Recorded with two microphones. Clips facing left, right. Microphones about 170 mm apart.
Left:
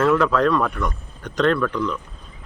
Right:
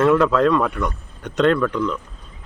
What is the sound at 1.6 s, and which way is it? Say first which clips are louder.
Speech: right 2 dB; 5° right (ahead or behind).